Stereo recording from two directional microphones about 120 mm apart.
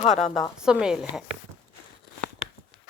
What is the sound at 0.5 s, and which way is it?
Speech, 5° right (ahead or behind).